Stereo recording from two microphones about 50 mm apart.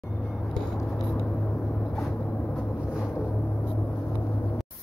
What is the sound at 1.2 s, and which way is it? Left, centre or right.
Vehicle, left.